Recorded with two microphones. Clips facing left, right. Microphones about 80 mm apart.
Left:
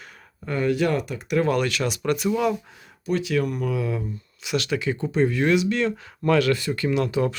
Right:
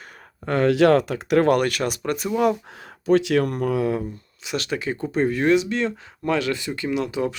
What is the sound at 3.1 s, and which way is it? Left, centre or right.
Speech, right.